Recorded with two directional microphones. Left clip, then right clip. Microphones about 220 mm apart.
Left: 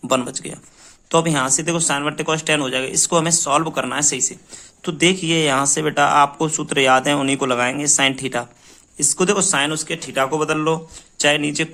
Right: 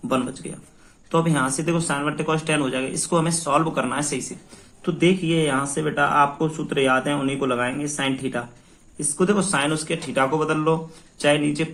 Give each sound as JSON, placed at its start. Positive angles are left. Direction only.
{"t": 0.1, "sound": "speech", "side_deg": 50}